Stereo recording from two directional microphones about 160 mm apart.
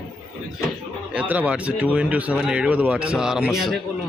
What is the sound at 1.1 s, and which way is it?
A man's voice, 10° right (ahead or behind).